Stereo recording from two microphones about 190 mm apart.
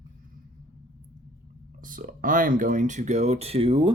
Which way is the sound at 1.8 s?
45° right (ahead or behind).